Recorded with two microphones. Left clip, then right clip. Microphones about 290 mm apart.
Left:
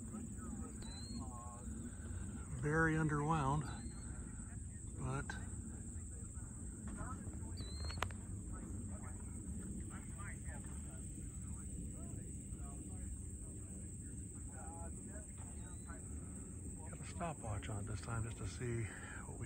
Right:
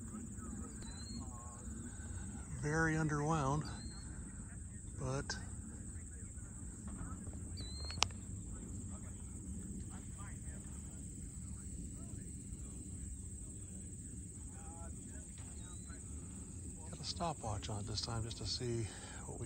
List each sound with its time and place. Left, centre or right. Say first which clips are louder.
2.5 s speech: even; centre
5.0 s a sound: right 3 dB; centre
17.0 s speech: right 5 dB; centre